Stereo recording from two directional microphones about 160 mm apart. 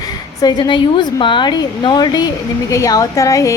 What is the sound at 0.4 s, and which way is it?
A woman's voice, 25° left (ahead or behind).